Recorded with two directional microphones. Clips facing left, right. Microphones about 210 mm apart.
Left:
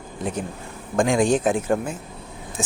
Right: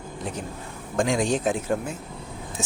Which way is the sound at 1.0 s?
50° left (ahead or behind).